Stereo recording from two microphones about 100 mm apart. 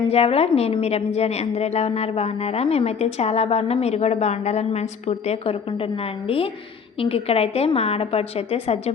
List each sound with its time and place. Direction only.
0.1 s a woman's voice: 90° left
6.2 s a woman's voice: 70° left (ahead or behind)
7.0 s a woman's voice: 85° left